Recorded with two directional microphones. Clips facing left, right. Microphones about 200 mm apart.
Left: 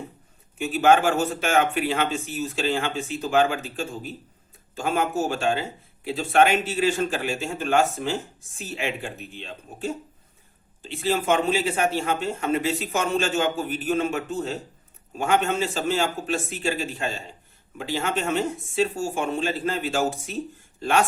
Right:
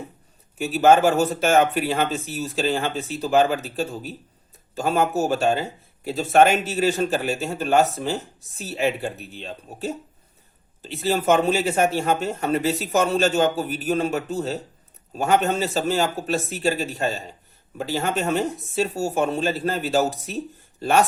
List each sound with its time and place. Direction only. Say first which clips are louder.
0.6 s a man's voice: right 3 dB; 40° right (ahead or behind)